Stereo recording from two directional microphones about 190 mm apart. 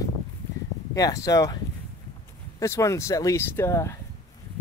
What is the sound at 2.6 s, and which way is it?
Speech, 15° left (ahead or behind).